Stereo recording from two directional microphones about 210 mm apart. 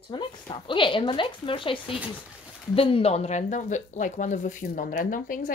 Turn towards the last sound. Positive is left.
turn(degrees=40)  # may be behind; listen again after turning